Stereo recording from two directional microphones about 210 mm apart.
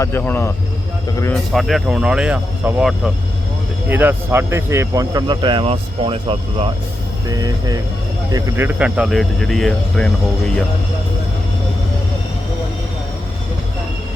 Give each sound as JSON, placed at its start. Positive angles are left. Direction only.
{"t": 0.0, "sound": "a man's voice", "side_deg": 10}
{"t": 7.3, "sound": "a man's voice", "side_deg": -20}